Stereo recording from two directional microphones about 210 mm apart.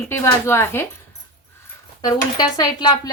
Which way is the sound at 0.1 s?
10° left (ahead or behind).